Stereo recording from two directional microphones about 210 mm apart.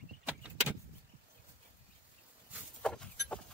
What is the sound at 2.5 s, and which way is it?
Livestock, 5° left (ahead or behind).